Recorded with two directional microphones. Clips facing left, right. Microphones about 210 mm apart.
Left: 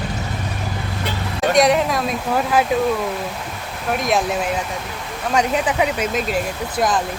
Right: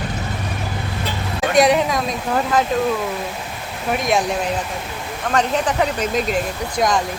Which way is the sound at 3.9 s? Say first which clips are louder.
Even; centre (ahead or behind).